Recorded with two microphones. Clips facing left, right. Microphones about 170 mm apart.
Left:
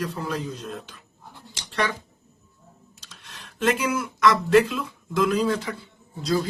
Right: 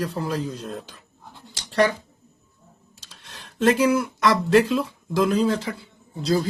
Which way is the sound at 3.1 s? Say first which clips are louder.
Right 1 dB; 30° right (ahead or behind).